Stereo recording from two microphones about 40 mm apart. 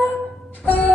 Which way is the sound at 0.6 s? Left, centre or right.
Left.